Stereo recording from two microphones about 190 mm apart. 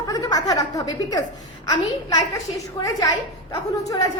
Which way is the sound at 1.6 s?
20° left (ahead or behind).